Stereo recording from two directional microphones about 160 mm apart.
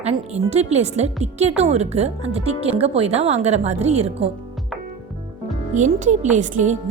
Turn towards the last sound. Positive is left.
turn(degrees=-50)  # may be behind; listen again after turning